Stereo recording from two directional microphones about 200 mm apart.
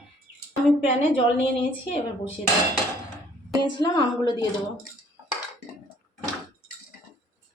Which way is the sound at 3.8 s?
20° left (ahead or behind).